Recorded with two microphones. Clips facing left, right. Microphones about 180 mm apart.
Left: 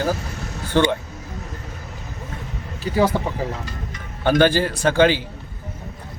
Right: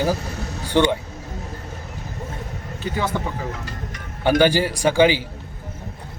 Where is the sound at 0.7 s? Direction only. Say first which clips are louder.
Even; 15° right (ahead or behind).